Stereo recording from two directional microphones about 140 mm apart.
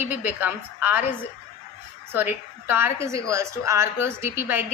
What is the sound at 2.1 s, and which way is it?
A woman's voice, 15° right (ahead or behind).